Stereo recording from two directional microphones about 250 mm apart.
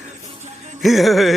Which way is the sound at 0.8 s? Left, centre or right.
Centre.